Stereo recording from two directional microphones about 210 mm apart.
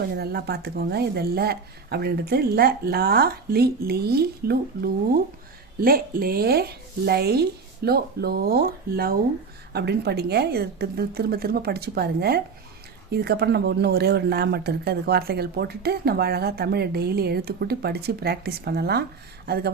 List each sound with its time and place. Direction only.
0.2 s speech: 50° right (ahead or behind)